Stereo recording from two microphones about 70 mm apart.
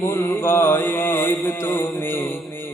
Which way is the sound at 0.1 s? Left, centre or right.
Left.